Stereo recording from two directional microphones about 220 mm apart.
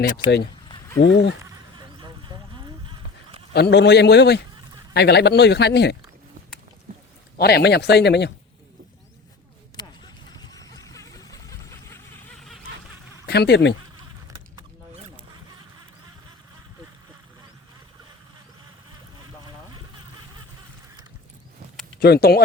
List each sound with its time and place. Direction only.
0.9 s speech: 50° left (ahead or behind)
2.0 s a sound: 20° right (ahead or behind)
3.5 s speech: 50° left (ahead or behind)
7.3 s speech: 45° left (ahead or behind)
9.8 s vehicle: 20° left (ahead or behind)
10.3 s a sound: 15° left (ahead or behind)
13.2 s speech: 45° left (ahead or behind)
22.0 s speech: 45° left (ahead or behind)